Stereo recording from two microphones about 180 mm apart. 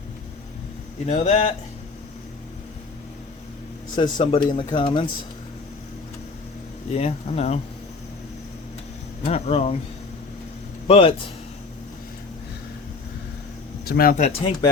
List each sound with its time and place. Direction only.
1.0 s speech: 35° left (ahead or behind)
3.9 s speech: 25° left (ahead or behind)
6.9 s speech: 35° left (ahead or behind)
9.2 s speech: 35° left (ahead or behind)
10.8 s speech: 30° left (ahead or behind)
13.8 s speech: 55° left (ahead or behind); by 14.5 s 35° left (ahead or behind)